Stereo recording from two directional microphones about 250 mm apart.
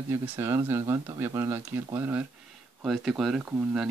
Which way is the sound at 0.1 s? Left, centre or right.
Centre.